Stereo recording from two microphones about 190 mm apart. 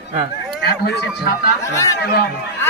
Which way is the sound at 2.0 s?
55° left (ahead or behind).